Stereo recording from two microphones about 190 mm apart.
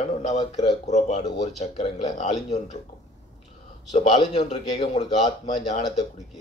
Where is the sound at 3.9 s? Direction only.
35° left (ahead or behind).